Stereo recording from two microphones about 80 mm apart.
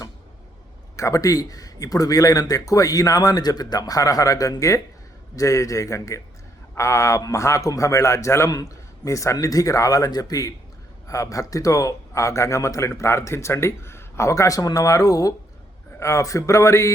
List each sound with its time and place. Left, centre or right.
0.9 s speech: left